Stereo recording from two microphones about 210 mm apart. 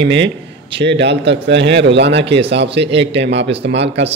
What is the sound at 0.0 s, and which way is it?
Speech, 60° right (ahead or behind).